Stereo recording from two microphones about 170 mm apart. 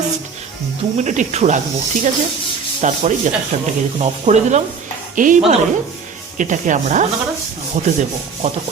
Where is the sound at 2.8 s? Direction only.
45° right (ahead or behind).